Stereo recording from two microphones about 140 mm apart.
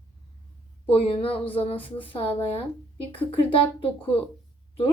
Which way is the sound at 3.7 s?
40° left (ahead or behind).